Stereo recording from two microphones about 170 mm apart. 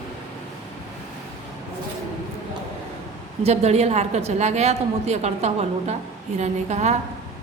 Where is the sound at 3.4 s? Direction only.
40° right (ahead or behind).